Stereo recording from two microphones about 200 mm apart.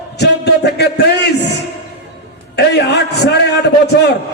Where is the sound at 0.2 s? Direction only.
55° left (ahead or behind).